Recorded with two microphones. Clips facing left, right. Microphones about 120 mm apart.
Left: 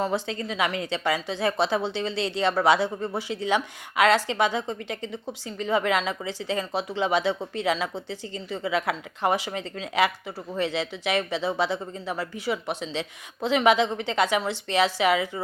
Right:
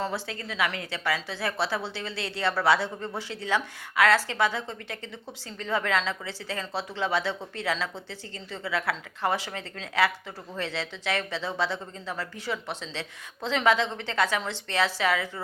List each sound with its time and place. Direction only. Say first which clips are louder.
0.0 s a woman's voice: left 5 dB; 20° left (ahead or behind)